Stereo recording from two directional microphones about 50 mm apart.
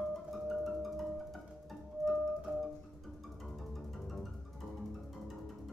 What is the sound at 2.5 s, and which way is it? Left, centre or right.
Music, right.